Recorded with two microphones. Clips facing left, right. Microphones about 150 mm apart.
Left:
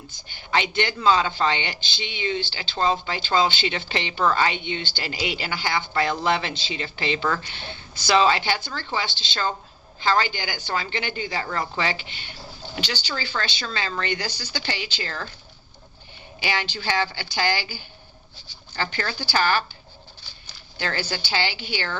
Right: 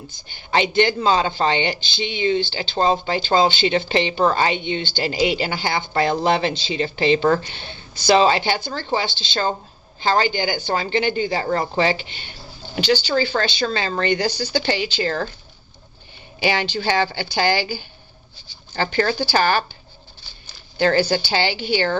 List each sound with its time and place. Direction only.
0.5 s speech: 25° right (ahead or behind)
16.8 s speech: 35° right (ahead or behind)
20.7 s speech: 40° right (ahead or behind)